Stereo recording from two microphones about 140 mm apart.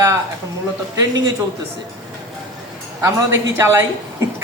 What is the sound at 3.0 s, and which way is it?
Speech, 20° right (ahead or behind).